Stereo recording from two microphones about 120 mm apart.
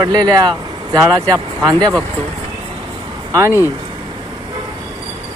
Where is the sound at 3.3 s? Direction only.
25° right (ahead or behind).